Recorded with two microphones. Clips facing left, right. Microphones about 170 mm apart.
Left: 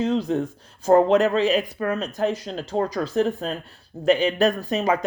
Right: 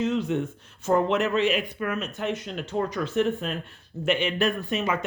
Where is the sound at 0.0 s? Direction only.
35° left (ahead or behind).